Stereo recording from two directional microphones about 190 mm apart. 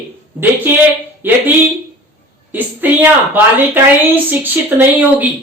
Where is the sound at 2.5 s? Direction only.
10° right (ahead or behind).